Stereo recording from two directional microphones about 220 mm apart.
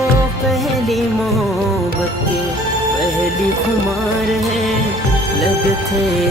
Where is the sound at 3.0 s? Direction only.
Centre (ahead or behind).